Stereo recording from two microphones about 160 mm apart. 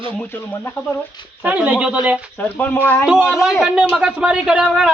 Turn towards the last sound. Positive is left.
turn(degrees=-5)  # may be behind; listen again after turning